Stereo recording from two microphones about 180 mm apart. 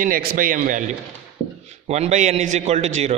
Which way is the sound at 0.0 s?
55° right (ahead or behind).